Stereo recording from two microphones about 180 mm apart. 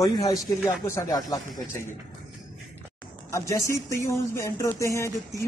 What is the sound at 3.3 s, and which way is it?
Speech, 15° left (ahead or behind).